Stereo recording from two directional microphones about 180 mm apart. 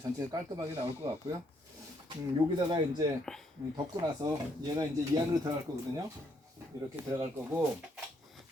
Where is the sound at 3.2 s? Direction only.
5° left (ahead or behind).